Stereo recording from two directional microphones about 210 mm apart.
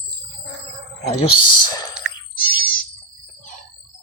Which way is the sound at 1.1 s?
20° left (ahead or behind).